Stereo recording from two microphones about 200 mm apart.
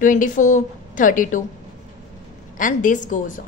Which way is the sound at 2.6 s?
40° left (ahead or behind).